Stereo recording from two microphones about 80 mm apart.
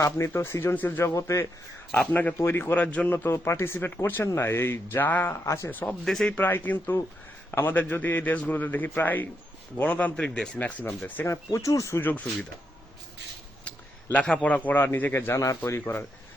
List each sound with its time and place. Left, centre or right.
0.0 s speech: left
2.1 s a man's voice: left
3.1 s speech: left
6.1 s speech: centre
6.3 s a man's voice: left
11.5 s speech: left
11.9 s a man's voice: left
13.7 s a sound: centre
14.4 s a man's voice: centre
15.3 s speech: left
15.8 s a man's voice: left